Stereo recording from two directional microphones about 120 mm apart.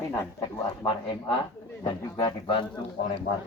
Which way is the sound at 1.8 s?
40° left (ahead or behind).